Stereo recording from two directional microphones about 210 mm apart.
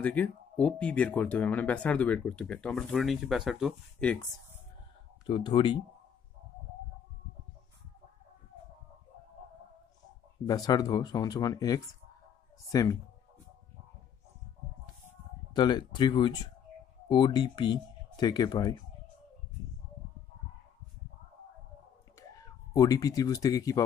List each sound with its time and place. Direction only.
0.0 s speech: 5° left (ahead or behind)
5.2 s speech: 25° left (ahead or behind)
10.4 s speech: 20° left (ahead or behind)
15.5 s speech: 20° left (ahead or behind)
22.3 s speech: 15° left (ahead or behind)